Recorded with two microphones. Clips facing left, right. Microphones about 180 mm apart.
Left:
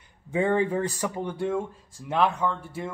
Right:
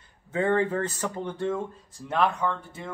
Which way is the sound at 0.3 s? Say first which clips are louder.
Left 1 dB; 15° left (ahead or behind).